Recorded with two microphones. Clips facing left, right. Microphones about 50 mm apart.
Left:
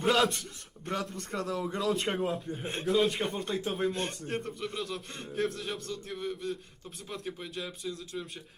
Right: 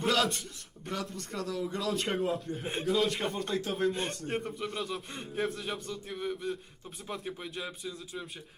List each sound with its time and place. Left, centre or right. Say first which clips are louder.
0.0 s a man's voice: left 2 dB; centre
1.1 s a man's voice: left 2 dB; left
1.6 s a man's voice: left 2 dB; centre